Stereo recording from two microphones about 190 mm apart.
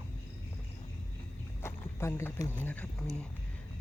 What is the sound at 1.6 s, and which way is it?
Speech, 15° left (ahead or behind).